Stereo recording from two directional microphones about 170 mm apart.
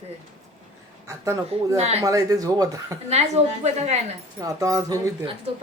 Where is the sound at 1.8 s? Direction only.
40° right (ahead or behind).